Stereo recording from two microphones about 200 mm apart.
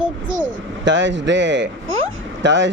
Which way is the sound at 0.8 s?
65° right (ahead or behind).